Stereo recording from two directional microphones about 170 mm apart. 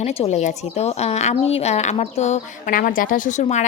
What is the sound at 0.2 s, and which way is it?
A woman's voice, 40° left (ahead or behind).